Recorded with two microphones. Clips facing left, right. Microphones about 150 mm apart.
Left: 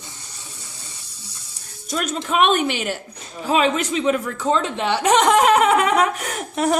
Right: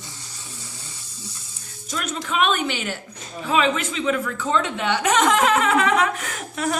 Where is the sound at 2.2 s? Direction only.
40° left (ahead or behind).